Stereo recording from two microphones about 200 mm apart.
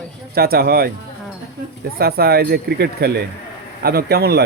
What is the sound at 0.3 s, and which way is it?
Speech, 50° right (ahead or behind).